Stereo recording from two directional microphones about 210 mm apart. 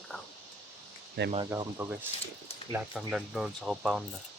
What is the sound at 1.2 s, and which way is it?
Speech, 55° right (ahead or behind).